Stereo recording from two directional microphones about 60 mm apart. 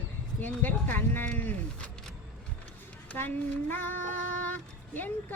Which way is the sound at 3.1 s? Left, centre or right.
Left.